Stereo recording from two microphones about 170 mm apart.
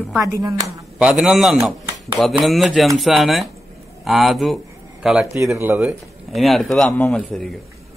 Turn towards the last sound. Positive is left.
turn(degrees=5)  # may be behind; listen again after turning